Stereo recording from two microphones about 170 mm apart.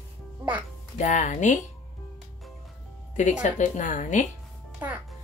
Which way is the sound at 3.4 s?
45° left (ahead or behind).